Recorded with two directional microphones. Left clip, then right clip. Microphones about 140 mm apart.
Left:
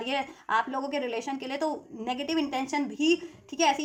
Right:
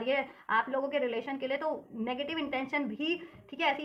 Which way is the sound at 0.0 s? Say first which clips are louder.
Even; 40° left (ahead or behind).